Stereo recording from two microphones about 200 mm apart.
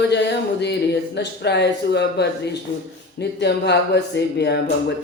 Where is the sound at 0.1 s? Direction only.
60° left (ahead or behind).